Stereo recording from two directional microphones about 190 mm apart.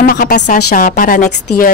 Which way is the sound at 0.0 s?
50° left (ahead or behind).